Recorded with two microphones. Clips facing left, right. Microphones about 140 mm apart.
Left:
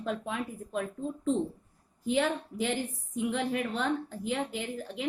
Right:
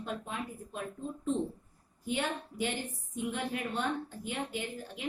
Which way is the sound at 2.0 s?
90° left.